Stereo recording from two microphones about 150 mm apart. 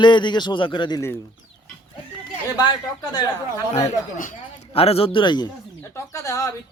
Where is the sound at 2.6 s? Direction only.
30° left (ahead or behind).